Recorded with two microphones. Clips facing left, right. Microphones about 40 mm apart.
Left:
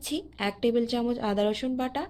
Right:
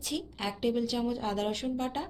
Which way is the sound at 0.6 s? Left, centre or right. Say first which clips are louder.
Left 4 dB; left.